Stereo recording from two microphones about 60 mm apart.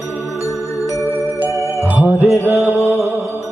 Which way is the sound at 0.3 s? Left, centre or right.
Left.